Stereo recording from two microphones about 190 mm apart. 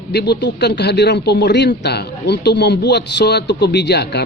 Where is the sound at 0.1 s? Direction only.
60° left (ahead or behind).